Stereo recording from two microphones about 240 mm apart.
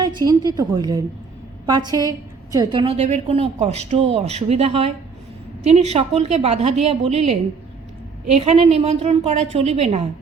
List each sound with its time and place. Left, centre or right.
0.0 s a woman's voice: centre